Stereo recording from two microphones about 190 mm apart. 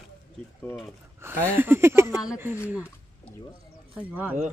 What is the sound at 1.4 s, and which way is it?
Speech, 10° right (ahead or behind).